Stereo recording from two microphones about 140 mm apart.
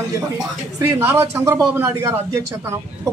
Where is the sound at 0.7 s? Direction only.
20° right (ahead or behind).